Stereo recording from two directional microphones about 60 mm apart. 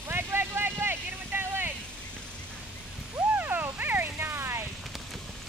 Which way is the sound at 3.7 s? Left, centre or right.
Right.